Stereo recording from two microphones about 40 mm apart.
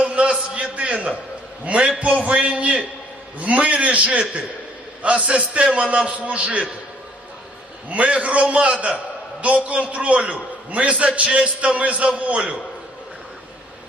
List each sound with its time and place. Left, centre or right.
0.0 s a sound: right
1.6 s a man's voice: right
7.9 s a man's voice: right